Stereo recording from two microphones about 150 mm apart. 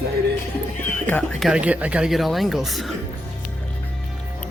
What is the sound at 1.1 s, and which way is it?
Speech, 10° left (ahead or behind).